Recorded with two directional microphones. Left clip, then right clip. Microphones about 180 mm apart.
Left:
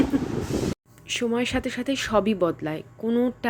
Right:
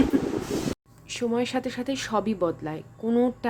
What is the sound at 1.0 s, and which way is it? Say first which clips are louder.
A woman's voice: left 2 dB; 15° left (ahead or behind).